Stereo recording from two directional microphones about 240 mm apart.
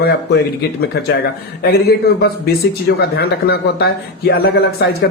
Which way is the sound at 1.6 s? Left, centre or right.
Left.